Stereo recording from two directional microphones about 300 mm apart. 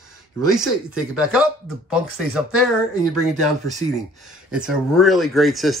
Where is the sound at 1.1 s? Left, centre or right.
Centre.